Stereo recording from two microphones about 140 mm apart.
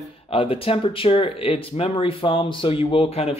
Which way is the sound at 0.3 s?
40° left (ahead or behind).